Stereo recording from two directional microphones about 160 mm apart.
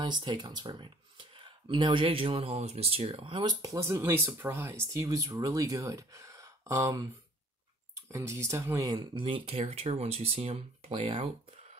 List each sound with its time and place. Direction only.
0.0 s speech: 30° right (ahead or behind)
8.1 s speech: 20° right (ahead or behind); by 11.2 s 35° right (ahead or behind)